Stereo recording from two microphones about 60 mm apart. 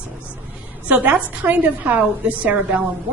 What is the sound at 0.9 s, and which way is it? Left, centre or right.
A woman's voice, right.